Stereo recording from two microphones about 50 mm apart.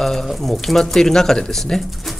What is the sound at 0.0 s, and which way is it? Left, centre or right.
Speech, centre.